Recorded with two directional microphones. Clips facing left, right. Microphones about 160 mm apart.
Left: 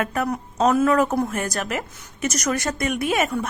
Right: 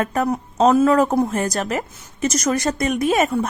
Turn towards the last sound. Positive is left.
turn(degrees=-35)  # may be behind; listen again after turning